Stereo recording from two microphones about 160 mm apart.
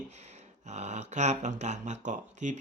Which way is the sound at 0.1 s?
45° right (ahead or behind).